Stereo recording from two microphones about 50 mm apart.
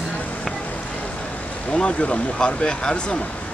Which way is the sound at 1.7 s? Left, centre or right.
Left.